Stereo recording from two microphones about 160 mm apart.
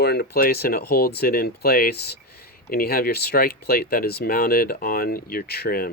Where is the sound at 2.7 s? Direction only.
70° left (ahead or behind).